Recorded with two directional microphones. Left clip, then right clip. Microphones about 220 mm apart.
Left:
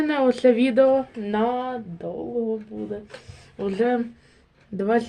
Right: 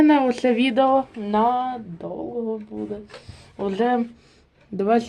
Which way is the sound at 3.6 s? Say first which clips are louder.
Right 1 dB; 25° right (ahead or behind).